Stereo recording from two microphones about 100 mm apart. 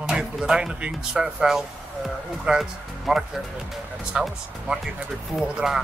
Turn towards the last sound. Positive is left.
turn(degrees=-5)  # may be behind; listen again after turning